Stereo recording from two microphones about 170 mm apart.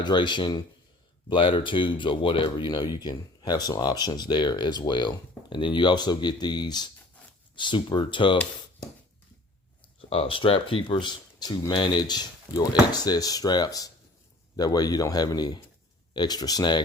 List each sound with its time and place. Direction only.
0.0 s speech: 25° left (ahead or behind)
10.1 s speech: 35° left (ahead or behind)